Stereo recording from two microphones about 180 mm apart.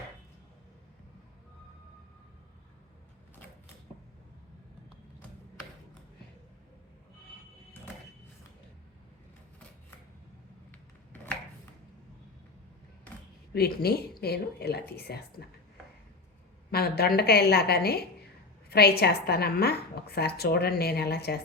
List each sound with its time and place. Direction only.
10.7 s a sound: 10° left (ahead or behind)
13.5 s a woman's voice: 60° left (ahead or behind)
16.7 s a woman's voice: 60° left (ahead or behind)